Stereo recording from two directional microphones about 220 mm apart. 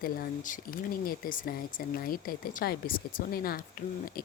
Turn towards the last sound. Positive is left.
turn(degrees=40)  # may be behind; listen again after turning